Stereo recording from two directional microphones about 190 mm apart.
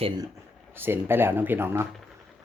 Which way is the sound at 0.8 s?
10° right (ahead or behind).